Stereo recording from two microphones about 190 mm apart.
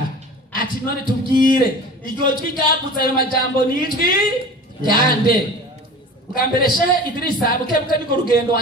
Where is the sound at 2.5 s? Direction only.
50° left (ahead or behind).